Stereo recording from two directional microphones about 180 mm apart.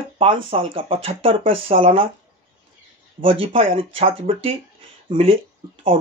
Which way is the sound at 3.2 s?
30° right (ahead or behind).